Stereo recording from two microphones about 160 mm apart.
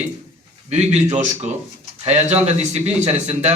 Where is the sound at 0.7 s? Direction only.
45° right (ahead or behind).